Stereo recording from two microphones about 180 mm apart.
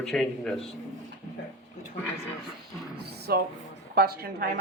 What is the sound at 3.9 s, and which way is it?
Speech, 60° right (ahead or behind).